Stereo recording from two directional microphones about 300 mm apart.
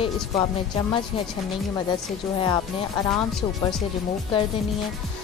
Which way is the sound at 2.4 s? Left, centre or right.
Centre.